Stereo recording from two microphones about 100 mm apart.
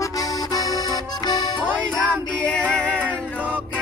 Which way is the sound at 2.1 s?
10° left (ahead or behind).